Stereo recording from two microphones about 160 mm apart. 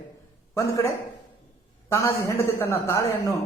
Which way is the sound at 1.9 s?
15° left (ahead or behind).